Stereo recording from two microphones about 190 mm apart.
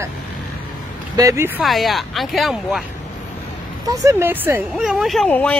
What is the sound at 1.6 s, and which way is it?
Speech, centre (ahead or behind).